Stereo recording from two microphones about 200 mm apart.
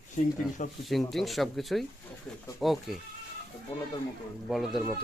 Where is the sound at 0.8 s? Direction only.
Centre (ahead or behind).